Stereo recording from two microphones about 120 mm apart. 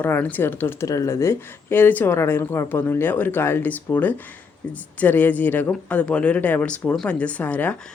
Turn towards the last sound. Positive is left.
turn(degrees=10)  # may be behind; listen again after turning